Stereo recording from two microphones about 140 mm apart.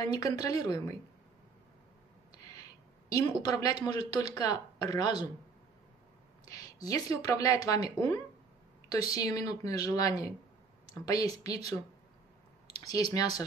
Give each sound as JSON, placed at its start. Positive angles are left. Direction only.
{"t": 0.0, "sound": "speech", "side_deg": 25}
{"t": 3.1, "sound": "speech", "side_deg": 25}
{"t": 6.4, "sound": "speech", "side_deg": 25}